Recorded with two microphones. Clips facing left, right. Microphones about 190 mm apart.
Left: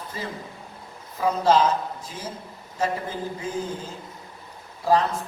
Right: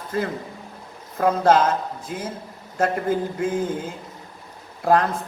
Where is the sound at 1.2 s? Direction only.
60° right (ahead or behind).